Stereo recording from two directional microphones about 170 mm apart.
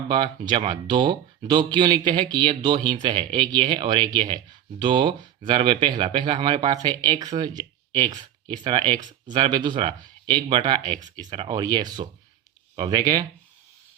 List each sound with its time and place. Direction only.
0.1 s speech: 25° right (ahead or behind)